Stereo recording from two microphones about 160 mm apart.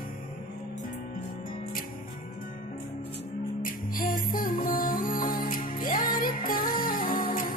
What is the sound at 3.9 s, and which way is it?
Music, 60° left (ahead or behind).